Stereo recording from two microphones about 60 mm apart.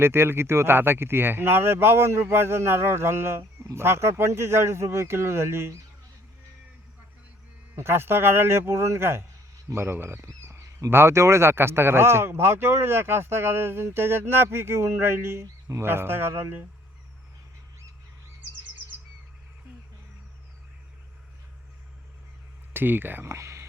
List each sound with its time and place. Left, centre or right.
0.0 s speech: right
7.8 s speech: right
22.7 s speech: right
23.2 s speech: right